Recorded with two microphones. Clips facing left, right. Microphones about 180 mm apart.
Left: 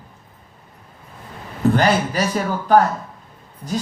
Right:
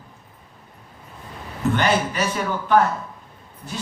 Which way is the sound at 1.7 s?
35° left (ahead or behind).